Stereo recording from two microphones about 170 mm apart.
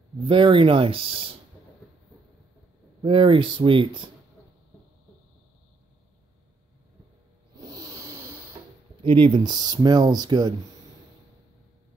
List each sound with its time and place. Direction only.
0.2 s speech: 30° right (ahead or behind)
3.0 s speech: 30° right (ahead or behind)
7.5 s a sound: 25° right (ahead or behind)
9.0 s speech: 30° right (ahead or behind)